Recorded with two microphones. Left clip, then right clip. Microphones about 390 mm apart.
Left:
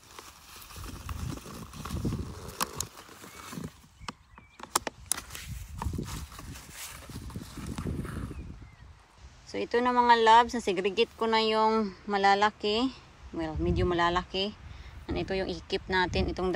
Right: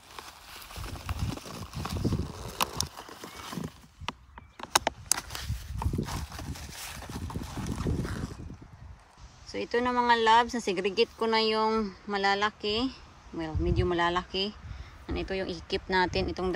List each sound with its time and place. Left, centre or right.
0.7 s clip-clop: right
2.0 s horse: right
2.6 s horse: centre
5.8 s horse: centre
7.6 s horse: right
9.5 s speech: centre